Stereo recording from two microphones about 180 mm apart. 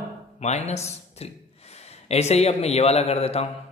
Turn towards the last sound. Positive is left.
turn(degrees=35)  # may be behind; listen again after turning